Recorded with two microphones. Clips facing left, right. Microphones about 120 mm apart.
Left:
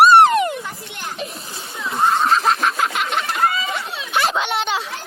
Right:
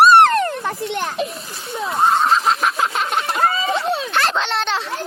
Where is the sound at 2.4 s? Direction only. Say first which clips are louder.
Even; 25° right (ahead or behind).